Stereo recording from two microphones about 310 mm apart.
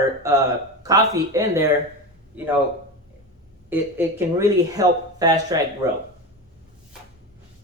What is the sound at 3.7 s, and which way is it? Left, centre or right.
Speech, centre.